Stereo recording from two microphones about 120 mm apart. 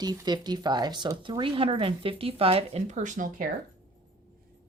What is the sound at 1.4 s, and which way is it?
Speech, 45° right (ahead or behind).